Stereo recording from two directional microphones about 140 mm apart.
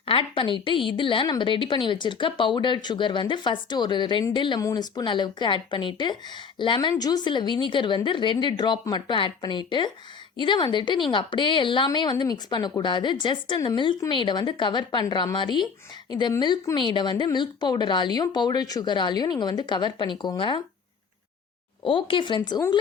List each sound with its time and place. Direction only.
0.0 s a woman's voice: 40° left (ahead or behind)
21.8 s a woman's voice: 40° left (ahead or behind)